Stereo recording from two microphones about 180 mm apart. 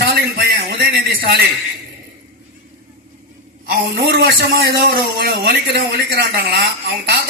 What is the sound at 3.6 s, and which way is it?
A man's voice, 60° right (ahead or behind).